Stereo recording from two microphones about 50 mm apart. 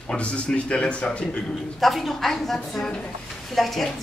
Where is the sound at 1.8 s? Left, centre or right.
Centre.